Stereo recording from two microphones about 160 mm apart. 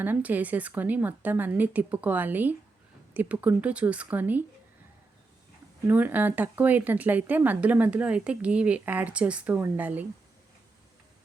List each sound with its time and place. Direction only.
0.0 s speech: 10° right (ahead or behind)
5.9 s speech: 10° right (ahead or behind)